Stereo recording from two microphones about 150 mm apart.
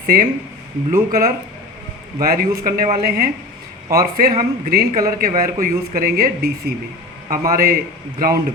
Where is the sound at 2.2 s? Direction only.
75° right (ahead or behind).